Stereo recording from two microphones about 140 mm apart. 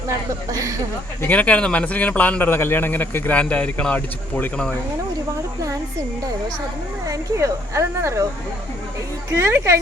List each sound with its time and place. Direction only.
0.1 s a woman's voice: 25° right (ahead or behind)
1.2 s a man's voice: 10° left (ahead or behind)
7.1 s a woman's voice: 20° right (ahead or behind)
9.3 s speech: 15° right (ahead or behind)